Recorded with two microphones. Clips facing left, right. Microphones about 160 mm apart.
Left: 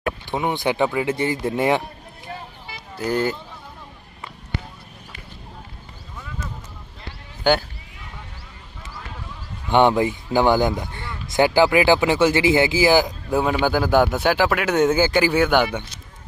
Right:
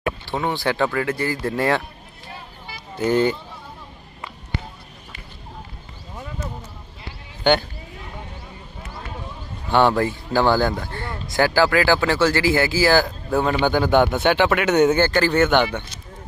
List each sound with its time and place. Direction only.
0.3 s speech: 15° left (ahead or behind)
3.0 s speech: centre (ahead or behind)
7.5 s speech: 5° left (ahead or behind)
9.7 s speech: 15° left (ahead or behind)